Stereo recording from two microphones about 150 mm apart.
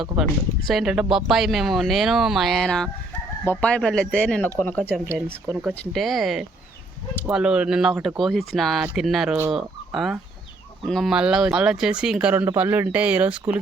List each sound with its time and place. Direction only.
0.7 s speech: centre (ahead or behind); by 4.8 s 15° left (ahead or behind)
5.1 s speech: 5° right (ahead or behind)